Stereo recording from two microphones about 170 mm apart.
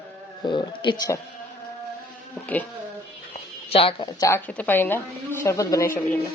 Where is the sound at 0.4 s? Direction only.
30° left (ahead or behind).